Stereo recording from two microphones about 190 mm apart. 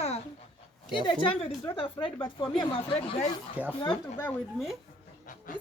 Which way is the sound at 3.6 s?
10° left (ahead or behind).